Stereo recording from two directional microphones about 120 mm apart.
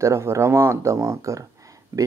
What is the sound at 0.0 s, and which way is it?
Speech, 25° right (ahead or behind).